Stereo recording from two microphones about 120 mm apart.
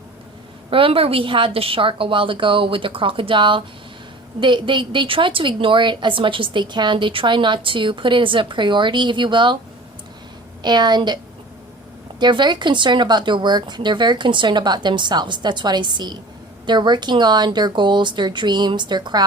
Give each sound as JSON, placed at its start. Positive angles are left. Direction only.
{"t": 0.7, "sound": "a woman's voice", "side_deg": -50}
{"t": 10.6, "sound": "speech", "side_deg": -35}
{"t": 12.2, "sound": "speech", "side_deg": -40}